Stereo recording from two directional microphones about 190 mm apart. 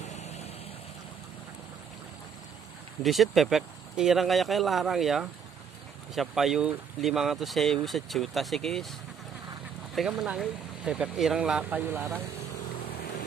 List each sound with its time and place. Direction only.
0.0 s vehicle: 35° left (ahead or behind)
3.0 s speech: centre (ahead or behind)
9.9 s speech: 5° right (ahead or behind)